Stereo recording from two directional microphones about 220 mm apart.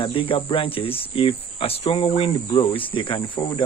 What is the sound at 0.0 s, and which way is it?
Speech, 25° left (ahead or behind).